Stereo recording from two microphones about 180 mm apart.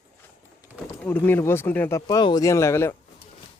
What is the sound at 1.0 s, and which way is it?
Speech, 10° left (ahead or behind).